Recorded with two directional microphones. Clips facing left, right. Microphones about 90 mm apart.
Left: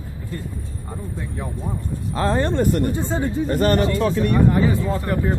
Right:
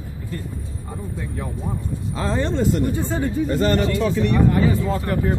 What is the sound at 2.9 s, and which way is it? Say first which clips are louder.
Speech: even; 25° left (ahead or behind).